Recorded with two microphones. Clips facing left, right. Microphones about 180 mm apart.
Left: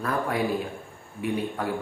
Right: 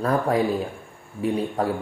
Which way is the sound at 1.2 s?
35° right (ahead or behind).